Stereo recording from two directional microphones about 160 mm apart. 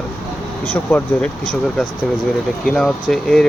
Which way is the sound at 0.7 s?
10° left (ahead or behind).